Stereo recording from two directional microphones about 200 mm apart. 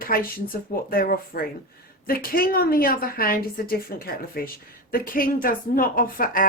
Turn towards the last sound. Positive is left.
turn(degrees=45)  # may be behind; listen again after turning